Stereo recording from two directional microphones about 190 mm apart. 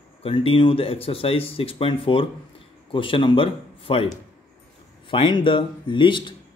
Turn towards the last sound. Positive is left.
turn(degrees=25)  # may be behind; listen again after turning